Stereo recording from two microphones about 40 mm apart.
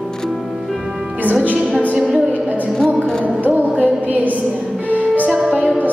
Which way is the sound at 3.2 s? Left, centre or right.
Right.